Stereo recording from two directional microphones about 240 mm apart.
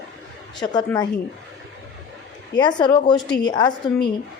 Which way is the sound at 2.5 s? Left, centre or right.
Centre.